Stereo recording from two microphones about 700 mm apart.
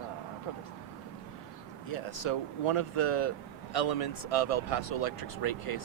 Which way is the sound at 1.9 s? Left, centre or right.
Left.